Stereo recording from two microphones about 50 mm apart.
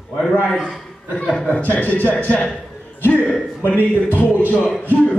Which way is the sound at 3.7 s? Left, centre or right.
Left.